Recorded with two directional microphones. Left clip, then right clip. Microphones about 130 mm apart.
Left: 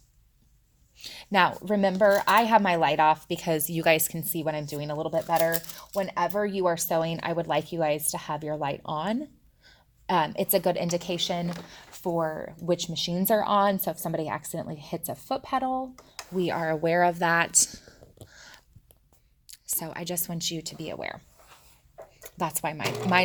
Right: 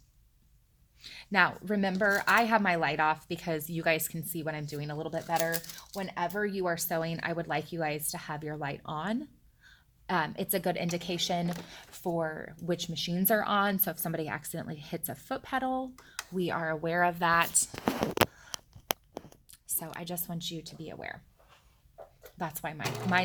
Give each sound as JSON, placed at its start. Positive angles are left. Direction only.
{"t": 0.9, "sound": "speech", "side_deg": 30}
{"t": 16.4, "sound": "speech", "side_deg": 25}
{"t": 16.8, "sound": "speech", "side_deg": 45}
{"t": 18.3, "sound": "a sound", "side_deg": 35}
{"t": 19.5, "sound": "speech", "side_deg": 30}
{"t": 22.2, "sound": "speech", "side_deg": 40}